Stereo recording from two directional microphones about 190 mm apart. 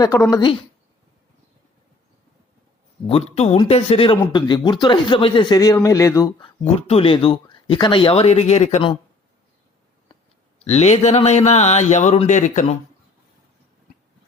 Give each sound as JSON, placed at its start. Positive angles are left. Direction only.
{"t": 0.0, "sound": "speech", "side_deg": 20}
{"t": 3.1, "sound": "speech", "side_deg": 30}
{"t": 6.7, "sound": "speech", "side_deg": 30}
{"t": 10.6, "sound": "speech", "side_deg": 35}